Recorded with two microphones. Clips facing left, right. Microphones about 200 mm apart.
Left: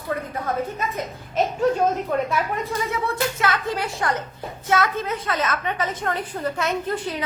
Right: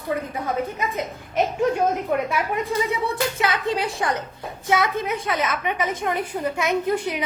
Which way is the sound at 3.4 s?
20° right (ahead or behind).